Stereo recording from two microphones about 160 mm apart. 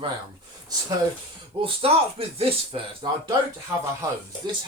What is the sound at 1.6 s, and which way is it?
Speech, 35° right (ahead or behind).